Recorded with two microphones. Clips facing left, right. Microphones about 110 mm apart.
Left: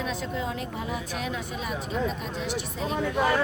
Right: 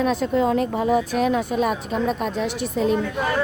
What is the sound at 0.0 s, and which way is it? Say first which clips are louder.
A woman's voice: right 11 dB; 55° right (ahead or behind).